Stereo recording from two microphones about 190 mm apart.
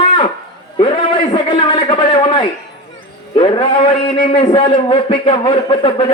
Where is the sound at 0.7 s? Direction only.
30° left (ahead or behind).